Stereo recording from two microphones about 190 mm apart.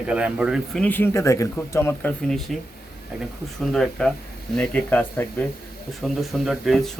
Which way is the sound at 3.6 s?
5° left (ahead or behind).